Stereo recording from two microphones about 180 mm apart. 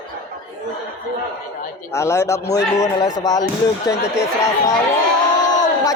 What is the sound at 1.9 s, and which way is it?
A man's voice, 15° left (ahead or behind).